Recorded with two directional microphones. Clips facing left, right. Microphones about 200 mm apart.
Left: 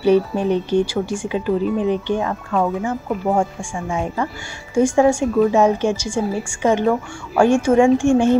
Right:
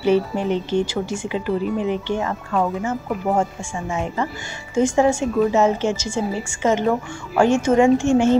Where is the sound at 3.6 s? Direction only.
15° left (ahead or behind).